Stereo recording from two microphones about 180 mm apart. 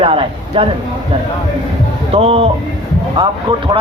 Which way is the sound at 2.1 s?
30° right (ahead or behind).